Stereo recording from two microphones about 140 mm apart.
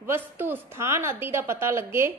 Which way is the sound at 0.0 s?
15° right (ahead or behind).